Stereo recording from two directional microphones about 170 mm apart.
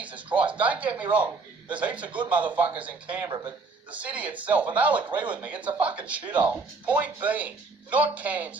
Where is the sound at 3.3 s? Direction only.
25° right (ahead or behind).